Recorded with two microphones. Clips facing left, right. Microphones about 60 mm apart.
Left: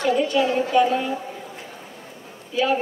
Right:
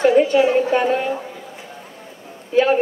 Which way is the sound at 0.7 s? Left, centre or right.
Right.